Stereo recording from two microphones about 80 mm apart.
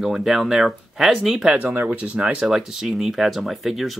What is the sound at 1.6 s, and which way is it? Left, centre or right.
Speech, right.